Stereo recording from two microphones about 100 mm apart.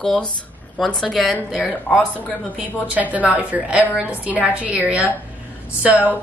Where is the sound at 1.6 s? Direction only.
15° left (ahead or behind).